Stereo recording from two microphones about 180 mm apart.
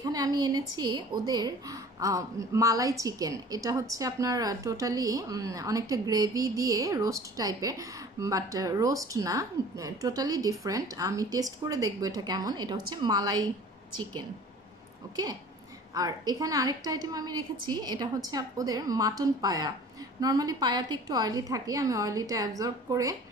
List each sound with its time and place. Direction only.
0.0 s a woman's voice: 20° right (ahead or behind)
15.9 s a woman's voice: 20° right (ahead or behind)